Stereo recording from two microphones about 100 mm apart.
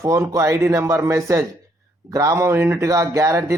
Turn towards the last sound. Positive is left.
turn(degrees=-30)  # may be behind; listen again after turning